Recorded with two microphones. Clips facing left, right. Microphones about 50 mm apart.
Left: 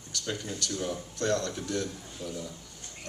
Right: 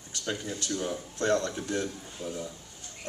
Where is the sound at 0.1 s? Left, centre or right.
Right.